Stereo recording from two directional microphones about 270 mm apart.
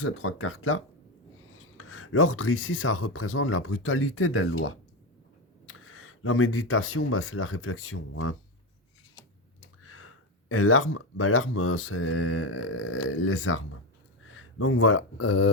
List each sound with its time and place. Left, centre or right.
0.0 s speech: left
9.6 s speech: left